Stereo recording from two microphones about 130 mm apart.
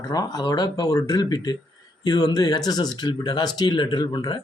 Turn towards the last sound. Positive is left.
turn(degrees=35)  # may be behind; listen again after turning